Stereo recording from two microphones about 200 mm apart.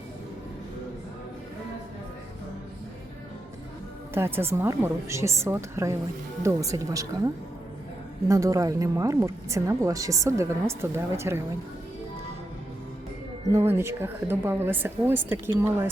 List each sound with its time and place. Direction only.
4.1 s speech: 10° right (ahead or behind)
8.3 s speech: 15° right (ahead or behind)
13.5 s speech: 10° right (ahead or behind)